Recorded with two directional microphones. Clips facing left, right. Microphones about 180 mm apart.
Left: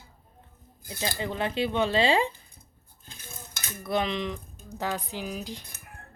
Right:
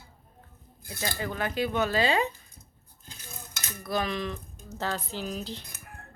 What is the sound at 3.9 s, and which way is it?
Speech, 20° left (ahead or behind).